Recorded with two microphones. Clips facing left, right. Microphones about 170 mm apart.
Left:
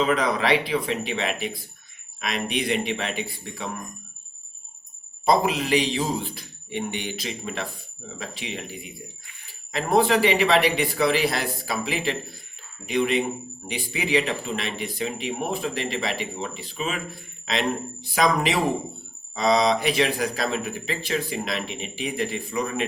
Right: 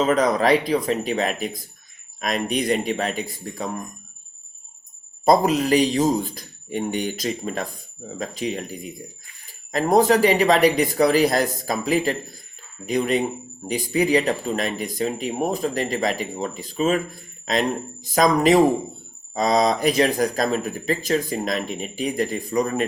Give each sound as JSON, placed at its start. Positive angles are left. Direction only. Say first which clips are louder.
{"t": 0.0, "sound": "speech", "louder": "right 4 dB", "side_deg": -40}
{"t": 5.2, "sound": "speech", "louder": "right 4 dB", "side_deg": -45}